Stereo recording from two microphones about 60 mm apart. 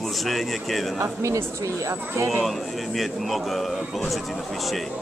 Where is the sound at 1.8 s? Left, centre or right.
Right.